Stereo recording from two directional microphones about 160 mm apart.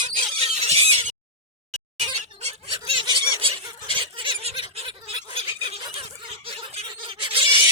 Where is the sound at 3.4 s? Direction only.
35° right (ahead or behind).